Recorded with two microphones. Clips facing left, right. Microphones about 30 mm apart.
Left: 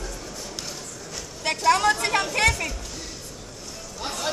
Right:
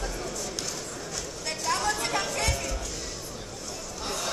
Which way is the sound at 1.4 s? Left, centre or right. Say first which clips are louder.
Left 9 dB; left.